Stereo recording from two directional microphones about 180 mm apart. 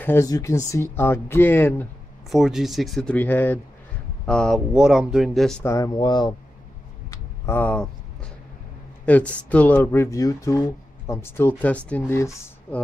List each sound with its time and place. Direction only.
0.0 s speech: 15° left (ahead or behind)
2.2 s speech: centre (ahead or behind)
5.6 s speech: 15° left (ahead or behind)
7.1 s a sound: 10° left (ahead or behind)
9.0 s speech: 10° left (ahead or behind)